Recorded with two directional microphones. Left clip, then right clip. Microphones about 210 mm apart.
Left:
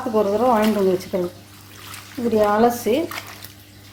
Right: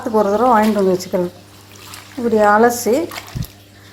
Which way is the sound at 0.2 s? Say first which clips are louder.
Right 5 dB; 15° right (ahead or behind).